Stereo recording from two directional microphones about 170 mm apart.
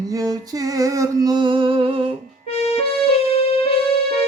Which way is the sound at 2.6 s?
35° left (ahead or behind).